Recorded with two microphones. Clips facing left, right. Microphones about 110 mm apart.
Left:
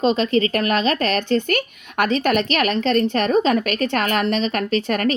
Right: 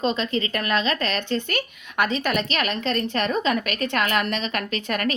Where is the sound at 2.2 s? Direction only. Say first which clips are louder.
Left 6 dB; 40° left (ahead or behind).